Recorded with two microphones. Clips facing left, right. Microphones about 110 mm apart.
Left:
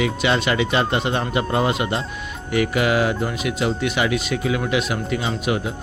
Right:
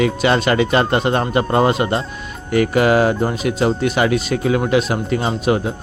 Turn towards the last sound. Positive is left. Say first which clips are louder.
# right 5 dB
turn(degrees=-35)  # may be behind; listen again after turning